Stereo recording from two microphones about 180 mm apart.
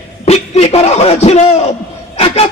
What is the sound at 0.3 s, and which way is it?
A man's voice, 35° left (ahead or behind).